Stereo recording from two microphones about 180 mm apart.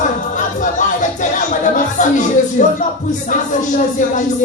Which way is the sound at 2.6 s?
45° left (ahead or behind).